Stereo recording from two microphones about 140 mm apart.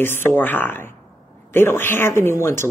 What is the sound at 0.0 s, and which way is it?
Speech, 15° left (ahead or behind).